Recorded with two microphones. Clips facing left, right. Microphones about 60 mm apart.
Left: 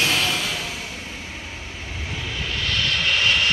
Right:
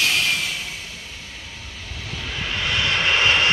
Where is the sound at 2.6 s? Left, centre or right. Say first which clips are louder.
Right 2 dB; right.